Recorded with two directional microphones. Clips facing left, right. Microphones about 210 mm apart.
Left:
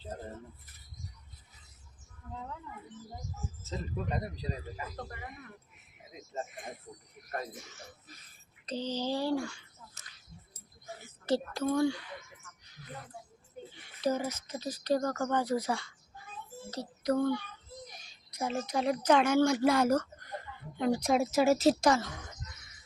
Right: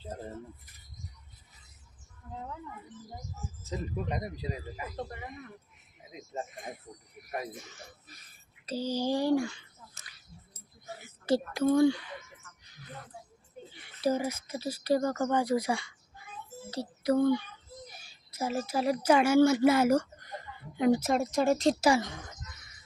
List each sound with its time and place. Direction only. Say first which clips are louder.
3.6 s speech: right 3 dB; 15° right (ahead or behind)
7.2 s speech: right 3 dB; 5° right (ahead or behind)
8.6 s speech: right 3 dB; 10° right (ahead or behind)
11.3 s speech: right 2 dB; 10° right (ahead or behind)
11.6 s speech: right 7 dB; 25° right (ahead or behind)
14.0 s speech: right 2 dB; 10° right (ahead or behind)
21.0 s speech: left 1 dB; centre (ahead or behind)
21.8 s speech: right 2 dB; 15° right (ahead or behind)